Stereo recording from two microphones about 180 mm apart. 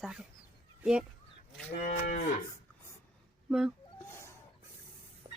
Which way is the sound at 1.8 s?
45° left (ahead or behind).